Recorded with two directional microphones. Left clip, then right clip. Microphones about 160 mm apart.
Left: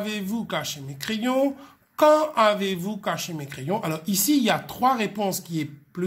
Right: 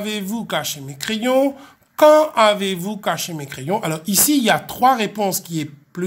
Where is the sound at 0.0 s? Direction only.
30° right (ahead or behind).